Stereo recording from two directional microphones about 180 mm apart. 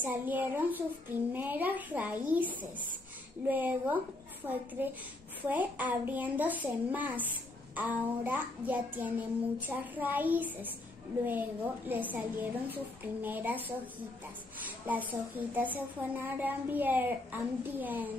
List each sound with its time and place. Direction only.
0.0 s a child's voice: 10° right (ahead or behind)
11.9 s a child's voice: 10° right (ahead or behind)
14.9 s a child's voice: 10° right (ahead or behind)